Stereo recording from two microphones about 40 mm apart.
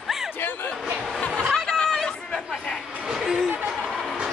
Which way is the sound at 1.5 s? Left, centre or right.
Centre.